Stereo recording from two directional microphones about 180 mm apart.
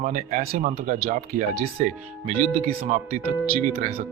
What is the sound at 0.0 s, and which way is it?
Speech, 45° right (ahead or behind).